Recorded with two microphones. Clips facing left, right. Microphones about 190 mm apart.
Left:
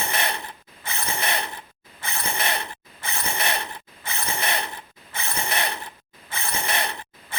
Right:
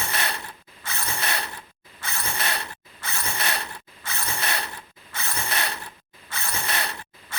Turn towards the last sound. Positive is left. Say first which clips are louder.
# left 3 dB
turn(degrees=20)  # may be behind; listen again after turning